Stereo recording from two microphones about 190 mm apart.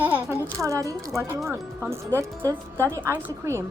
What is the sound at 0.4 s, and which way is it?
Speech, 15° right (ahead or behind).